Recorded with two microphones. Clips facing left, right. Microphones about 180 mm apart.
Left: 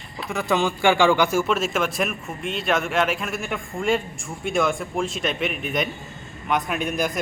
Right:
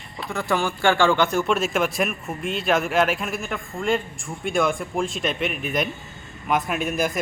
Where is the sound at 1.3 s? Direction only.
Centre (ahead or behind).